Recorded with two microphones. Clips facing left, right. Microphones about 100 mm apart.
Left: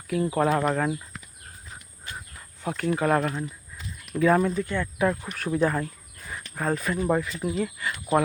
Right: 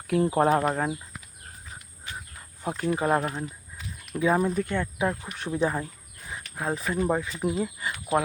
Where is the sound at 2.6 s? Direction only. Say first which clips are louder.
Left 1 dB; 25° right (ahead or behind).